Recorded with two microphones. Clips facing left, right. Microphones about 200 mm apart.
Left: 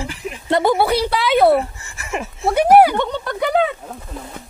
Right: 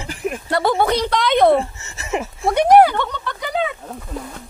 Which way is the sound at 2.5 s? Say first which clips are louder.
Even; 5° left (ahead or behind).